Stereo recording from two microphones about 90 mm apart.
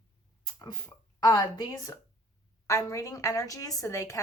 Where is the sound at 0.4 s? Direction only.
45° left (ahead or behind).